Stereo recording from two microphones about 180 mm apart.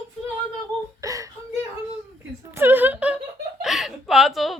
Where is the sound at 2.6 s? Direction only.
10° right (ahead or behind).